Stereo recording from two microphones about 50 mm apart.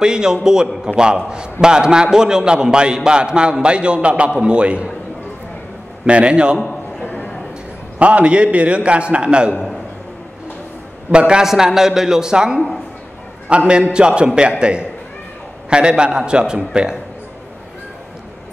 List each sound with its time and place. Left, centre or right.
0.0 s a man's voice: centre
6.0 s a man's voice: right
6.6 s a sound: centre
8.0 s a man's voice: right
11.1 s a man's voice: centre